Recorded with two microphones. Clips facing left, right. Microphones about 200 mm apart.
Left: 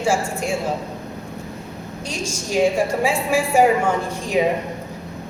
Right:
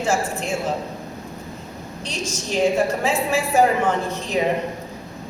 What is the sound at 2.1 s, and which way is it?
A woman's voice, 10° left (ahead or behind).